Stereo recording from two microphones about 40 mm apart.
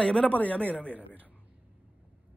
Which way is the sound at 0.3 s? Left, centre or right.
Left.